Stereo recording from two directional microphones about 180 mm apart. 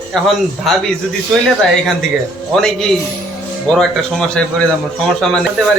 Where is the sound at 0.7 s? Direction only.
Centre (ahead or behind).